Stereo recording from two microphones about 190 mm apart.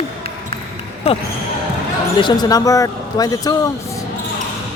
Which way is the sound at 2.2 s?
20° left (ahead or behind).